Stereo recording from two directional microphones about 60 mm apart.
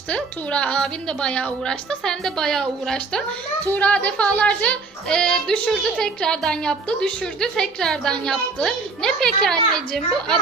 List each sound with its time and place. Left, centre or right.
0.1 s speech: centre
3.7 s speech: left; by 10.3 s centre